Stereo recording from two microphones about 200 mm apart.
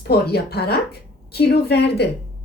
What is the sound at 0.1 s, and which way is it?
A woman's voice, 50° left (ahead or behind).